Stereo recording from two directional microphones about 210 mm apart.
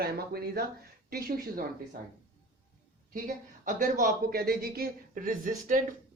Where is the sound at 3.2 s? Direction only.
40° right (ahead or behind).